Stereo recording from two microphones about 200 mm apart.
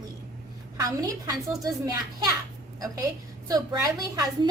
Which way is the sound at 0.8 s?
20° right (ahead or behind).